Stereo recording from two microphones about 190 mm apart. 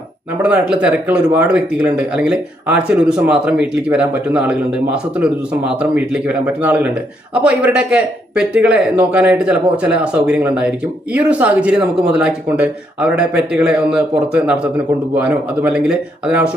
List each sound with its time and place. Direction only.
0.4 s speech: 5° right (ahead or behind)